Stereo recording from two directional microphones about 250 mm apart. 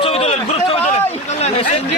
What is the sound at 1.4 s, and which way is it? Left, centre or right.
Chatter, left.